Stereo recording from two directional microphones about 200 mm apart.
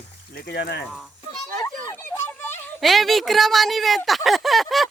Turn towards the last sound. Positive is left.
turn(degrees=0)  # may be behind; listen again after turning